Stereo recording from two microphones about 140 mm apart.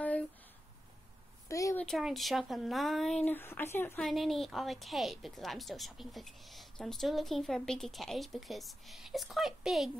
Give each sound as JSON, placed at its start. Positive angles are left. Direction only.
{"t": 1.5, "sound": "a sound", "side_deg": 25}
{"t": 1.8, "sound": "a woman's voice", "side_deg": 0}
{"t": 3.3, "sound": "speech", "side_deg": 15}
{"t": 4.0, "sound": "a woman's voice", "side_deg": 0}